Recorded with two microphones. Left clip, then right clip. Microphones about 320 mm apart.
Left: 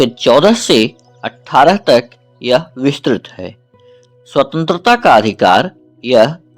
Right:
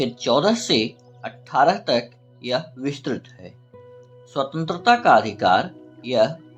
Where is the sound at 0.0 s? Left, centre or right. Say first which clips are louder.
Left 11 dB; left.